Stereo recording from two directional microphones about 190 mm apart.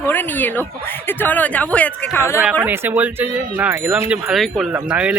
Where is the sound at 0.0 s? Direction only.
10° left (ahead or behind).